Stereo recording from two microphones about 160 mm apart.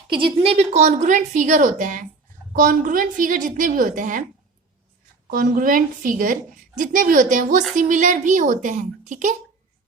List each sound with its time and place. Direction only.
0.1 s a woman's voice: 30° right (ahead or behind); by 4.2 s 55° right (ahead or behind)
5.3 s a woman's voice: 60° right (ahead or behind)